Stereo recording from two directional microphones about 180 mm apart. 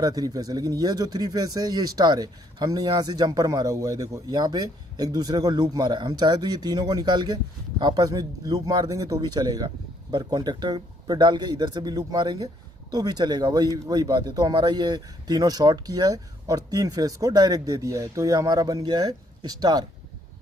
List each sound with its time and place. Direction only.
0.0 s speech: 20° right (ahead or behind)